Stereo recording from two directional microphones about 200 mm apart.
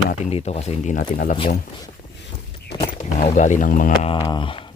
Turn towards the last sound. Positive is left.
turn(degrees=25)  # may be behind; listen again after turning